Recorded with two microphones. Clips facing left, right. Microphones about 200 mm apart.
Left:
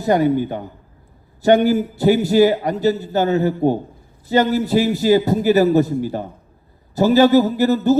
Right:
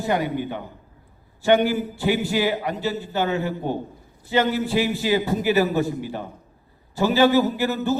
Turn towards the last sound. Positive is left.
turn(degrees=40)  # may be behind; listen again after turning